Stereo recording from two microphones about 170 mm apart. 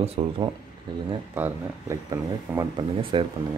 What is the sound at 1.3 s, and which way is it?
Speech, 15° right (ahead or behind).